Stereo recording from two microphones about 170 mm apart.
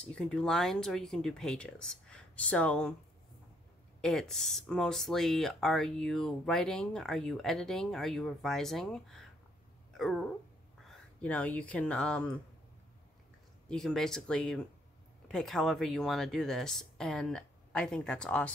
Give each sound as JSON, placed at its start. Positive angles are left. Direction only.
{"t": 0.0, "sound": "speech", "side_deg": 5}
{"t": 4.0, "sound": "speech", "side_deg": 5}
{"t": 13.7, "sound": "speech", "side_deg": 5}